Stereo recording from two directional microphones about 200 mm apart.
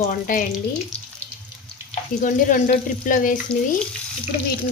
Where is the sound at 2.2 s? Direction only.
40° left (ahead or behind).